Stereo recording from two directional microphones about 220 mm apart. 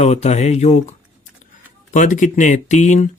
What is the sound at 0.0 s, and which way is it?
Speech, 30° left (ahead or behind).